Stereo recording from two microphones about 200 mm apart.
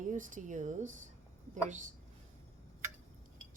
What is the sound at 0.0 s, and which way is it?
Speech, 40° right (ahead or behind).